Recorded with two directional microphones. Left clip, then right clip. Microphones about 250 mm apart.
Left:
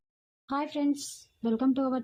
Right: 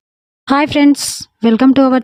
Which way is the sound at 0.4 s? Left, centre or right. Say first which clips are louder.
Right 19 dB; right.